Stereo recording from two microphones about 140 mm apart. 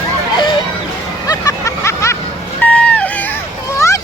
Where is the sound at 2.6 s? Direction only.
10° left (ahead or behind).